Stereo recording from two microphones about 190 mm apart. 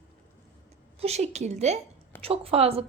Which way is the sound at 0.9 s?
35° right (ahead or behind).